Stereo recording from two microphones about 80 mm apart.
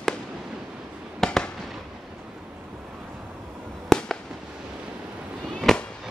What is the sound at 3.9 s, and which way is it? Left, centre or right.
Fireworks, centre.